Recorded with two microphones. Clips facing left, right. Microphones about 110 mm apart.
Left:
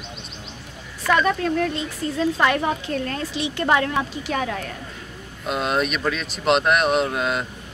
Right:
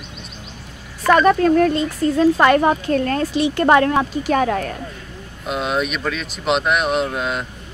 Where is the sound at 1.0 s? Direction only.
50° right (ahead or behind).